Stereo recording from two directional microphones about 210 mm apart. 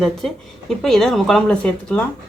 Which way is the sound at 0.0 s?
Centre (ahead or behind).